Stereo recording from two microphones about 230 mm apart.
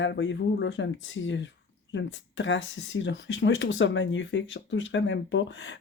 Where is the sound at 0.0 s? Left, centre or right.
Left.